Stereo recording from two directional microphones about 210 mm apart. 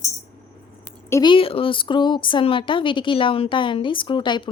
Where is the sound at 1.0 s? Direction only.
15° left (ahead or behind).